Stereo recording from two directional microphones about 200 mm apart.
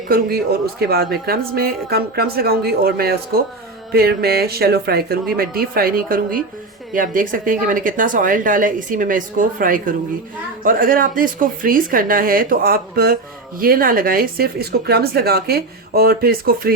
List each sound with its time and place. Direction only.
0.1 s speech: 50° right (ahead or behind)